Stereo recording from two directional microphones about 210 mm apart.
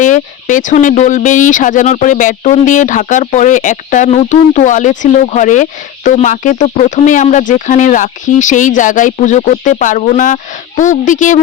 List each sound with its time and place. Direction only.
0.0 s speech: 40° left (ahead or behind)